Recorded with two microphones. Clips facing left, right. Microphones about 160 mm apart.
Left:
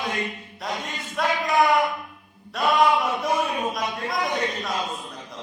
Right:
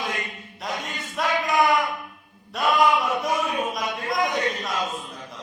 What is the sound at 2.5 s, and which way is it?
Chant, centre (ahead or behind).